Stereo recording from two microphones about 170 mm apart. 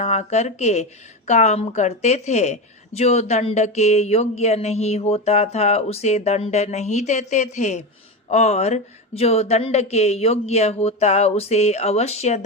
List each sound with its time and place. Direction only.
0.0 s a woman's voice: 40° left (ahead or behind)